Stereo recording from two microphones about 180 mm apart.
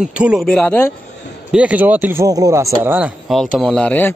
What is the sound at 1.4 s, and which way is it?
A man's voice, 5° right (ahead or behind).